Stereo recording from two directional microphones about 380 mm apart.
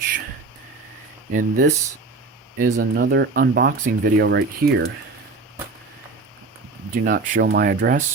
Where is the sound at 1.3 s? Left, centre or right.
Right.